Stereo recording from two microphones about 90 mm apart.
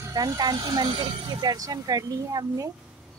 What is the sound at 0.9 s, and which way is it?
Speech, 90° right.